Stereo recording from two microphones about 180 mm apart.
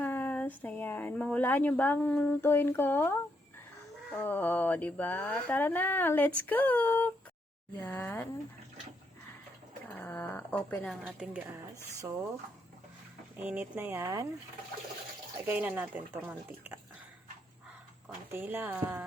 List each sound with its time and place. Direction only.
0.0 s speech: 10° left (ahead or behind)
4.2 s speech: 10° left (ahead or behind)
9.9 s a sound: 10° left (ahead or behind)
11.0 s a woman's voice: 5° right (ahead or behind)
11.9 s speech: 20° right (ahead or behind)
13.3 s speech: 10° right (ahead or behind)
15.4 s speech: 10° right (ahead or behind)
18.3 s speech: 10° right (ahead or behind)